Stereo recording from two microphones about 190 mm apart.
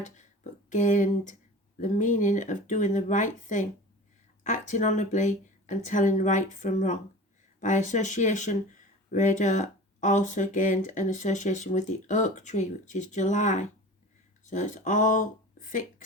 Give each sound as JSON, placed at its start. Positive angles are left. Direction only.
{"t": 0.7, "sound": "speech", "side_deg": 40}